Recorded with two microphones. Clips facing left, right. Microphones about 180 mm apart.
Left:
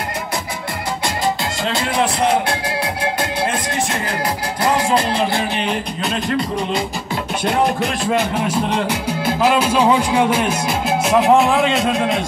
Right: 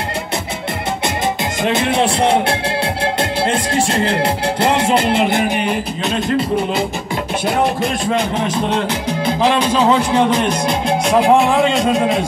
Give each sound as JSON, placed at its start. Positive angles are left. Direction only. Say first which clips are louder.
{"t": 1.6, "sound": "music", "louder": "right 5 dB", "side_deg": -20}
{"t": 3.7, "sound": "music", "louder": "right 6 dB", "side_deg": -30}
{"t": 5.6, "sound": "speech", "louder": "right 2 dB", "side_deg": -5}